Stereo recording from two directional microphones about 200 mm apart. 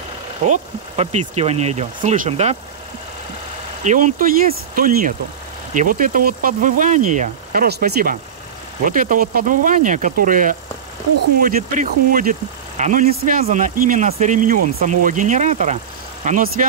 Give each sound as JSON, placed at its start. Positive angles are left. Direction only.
{"t": 0.5, "sound": "speech", "side_deg": -35}
{"t": 3.8, "sound": "speech", "side_deg": -40}
{"t": 7.6, "sound": "speech", "side_deg": -55}